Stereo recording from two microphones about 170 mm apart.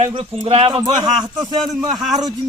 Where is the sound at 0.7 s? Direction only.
25° right (ahead or behind).